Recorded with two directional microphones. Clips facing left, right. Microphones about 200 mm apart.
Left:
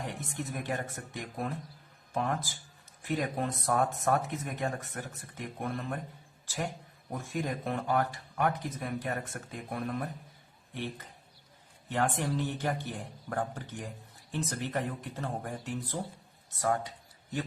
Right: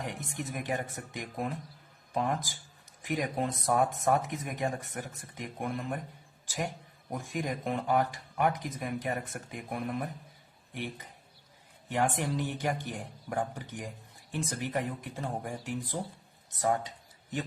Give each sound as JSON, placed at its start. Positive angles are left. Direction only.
{"t": 0.0, "sound": "speech", "side_deg": -15}
{"t": 6.4, "sound": "a sound", "side_deg": -15}
{"t": 7.1, "sound": "speech", "side_deg": -15}
{"t": 11.9, "sound": "speech", "side_deg": -15}